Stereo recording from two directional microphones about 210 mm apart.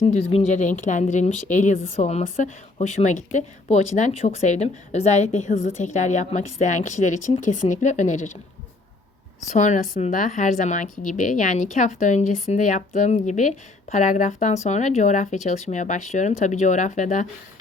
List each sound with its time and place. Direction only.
0.0 s a woman's voice: 30° left (ahead or behind)
9.5 s a woman's voice: 35° left (ahead or behind)